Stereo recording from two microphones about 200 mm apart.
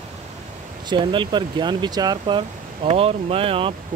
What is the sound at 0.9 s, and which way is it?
Speech, 25° right (ahead or behind).